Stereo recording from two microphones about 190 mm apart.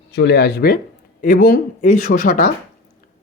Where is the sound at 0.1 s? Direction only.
65° left (ahead or behind); by 2.5 s 45° left (ahead or behind).